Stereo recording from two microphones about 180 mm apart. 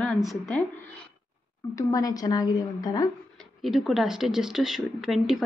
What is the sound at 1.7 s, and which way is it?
A woman's voice, 20° left (ahead or behind).